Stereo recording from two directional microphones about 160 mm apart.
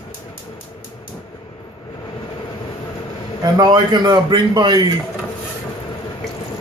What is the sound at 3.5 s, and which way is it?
A man's voice, 25° right (ahead or behind).